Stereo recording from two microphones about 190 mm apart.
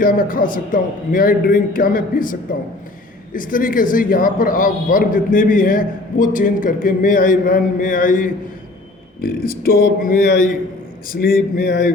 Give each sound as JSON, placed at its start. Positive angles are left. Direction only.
{"t": 0.0, "sound": "a man's voice", "side_deg": 45}